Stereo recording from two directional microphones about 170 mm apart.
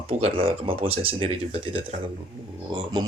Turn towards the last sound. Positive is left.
turn(degrees=-25)  # may be behind; listen again after turning